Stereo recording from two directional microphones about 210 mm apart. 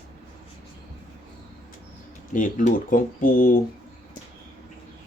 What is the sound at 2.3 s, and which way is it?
Speech, 40° left (ahead or behind).